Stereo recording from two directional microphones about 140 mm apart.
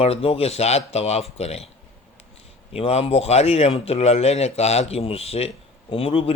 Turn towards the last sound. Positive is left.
turn(degrees=40)  # may be behind; listen again after turning